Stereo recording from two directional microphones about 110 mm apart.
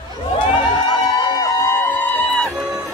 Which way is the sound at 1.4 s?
20° left (ahead or behind).